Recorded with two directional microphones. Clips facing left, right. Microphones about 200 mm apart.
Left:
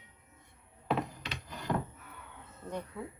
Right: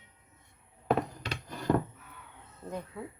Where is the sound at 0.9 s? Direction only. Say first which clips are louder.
Right 4 dB; 45° right (ahead or behind).